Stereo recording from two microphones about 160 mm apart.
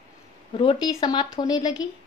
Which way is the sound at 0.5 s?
35° left (ahead or behind).